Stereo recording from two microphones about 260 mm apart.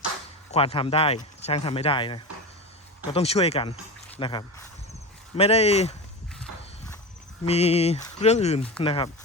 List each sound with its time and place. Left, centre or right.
0.5 s speech: left
7.4 s speech: left